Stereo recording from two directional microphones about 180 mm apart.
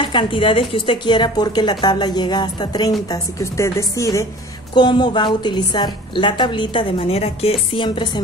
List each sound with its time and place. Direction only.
0.0 s a woman's voice: 25° left (ahead or behind)